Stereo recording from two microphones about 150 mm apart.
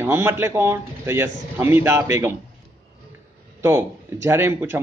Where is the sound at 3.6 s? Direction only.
15° right (ahead or behind).